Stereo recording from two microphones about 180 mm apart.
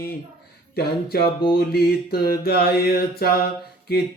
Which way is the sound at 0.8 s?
60° left (ahead or behind).